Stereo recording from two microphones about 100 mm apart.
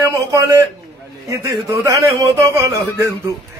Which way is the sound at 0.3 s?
35° right (ahead or behind).